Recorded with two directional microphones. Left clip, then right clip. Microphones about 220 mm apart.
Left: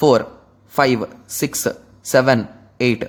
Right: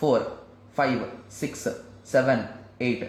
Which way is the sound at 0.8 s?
45° left (ahead or behind).